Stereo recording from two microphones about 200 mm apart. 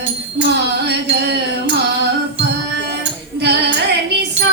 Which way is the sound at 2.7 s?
60° right (ahead or behind).